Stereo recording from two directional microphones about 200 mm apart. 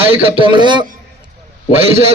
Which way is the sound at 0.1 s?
25° right (ahead or behind).